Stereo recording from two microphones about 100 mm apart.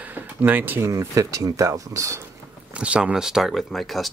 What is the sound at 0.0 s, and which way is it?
Speech, 15° right (ahead or behind).